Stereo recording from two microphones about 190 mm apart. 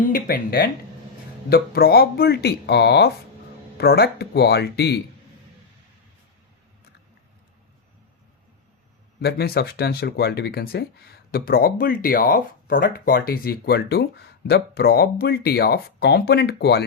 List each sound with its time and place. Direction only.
0.1 s speech: 55° left (ahead or behind)
9.2 s speech: 55° left (ahead or behind)